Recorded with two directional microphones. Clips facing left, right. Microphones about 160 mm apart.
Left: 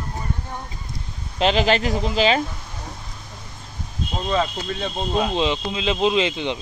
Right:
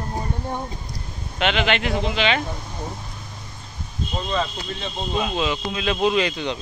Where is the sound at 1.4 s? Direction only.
35° left (ahead or behind).